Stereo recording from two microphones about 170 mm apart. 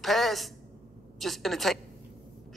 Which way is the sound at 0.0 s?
Centre (ahead or behind).